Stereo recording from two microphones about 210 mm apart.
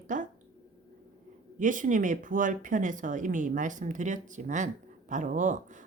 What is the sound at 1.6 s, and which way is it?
A woman's voice, 40° right (ahead or behind).